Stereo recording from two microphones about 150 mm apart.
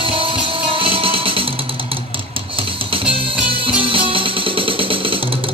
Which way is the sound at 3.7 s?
35° right (ahead or behind).